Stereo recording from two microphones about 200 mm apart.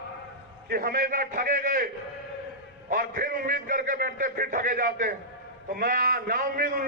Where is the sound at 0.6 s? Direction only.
45° right (ahead or behind).